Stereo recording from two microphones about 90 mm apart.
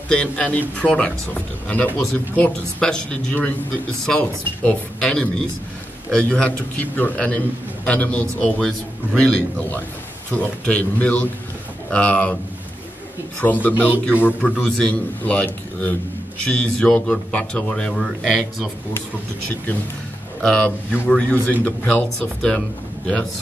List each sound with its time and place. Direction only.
0.1 s a man's voice: 15° left (ahead or behind)
13.4 s a man's voice: 20° left (ahead or behind)
13.7 s speech: 20° right (ahead or behind)
14.4 s a man's voice: 10° left (ahead or behind)
20.4 s a man's voice: 10° left (ahead or behind)